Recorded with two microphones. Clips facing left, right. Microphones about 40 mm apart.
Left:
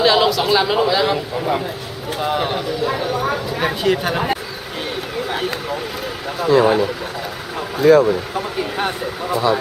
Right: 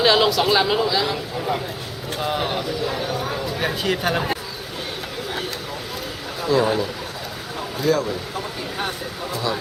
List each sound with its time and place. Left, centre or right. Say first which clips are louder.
0.0 s speech: left 2 dB; centre
0.8 s speech: left 5 dB; left
2.0 s speech: left 4 dB; centre
2.8 s speech: left 5 dB; centre
3.5 s a sound: left 4 dB; left
3.8 s speech: left 4 dB; centre
5.3 s vehicle: left 6 dB; left
6.4 s speech: left 6 dB; left
7.9 s speech: left 10 dB; left